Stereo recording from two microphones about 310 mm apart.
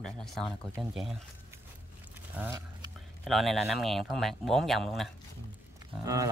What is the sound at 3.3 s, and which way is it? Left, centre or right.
Speech, centre.